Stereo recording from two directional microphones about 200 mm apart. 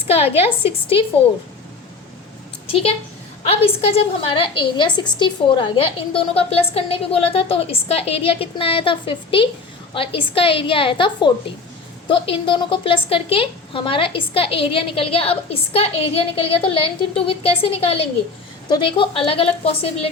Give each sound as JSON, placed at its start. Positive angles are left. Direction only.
{"t": 0.1, "sound": "a woman's voice", "side_deg": 30}
{"t": 2.6, "sound": "a woman's voice", "side_deg": 30}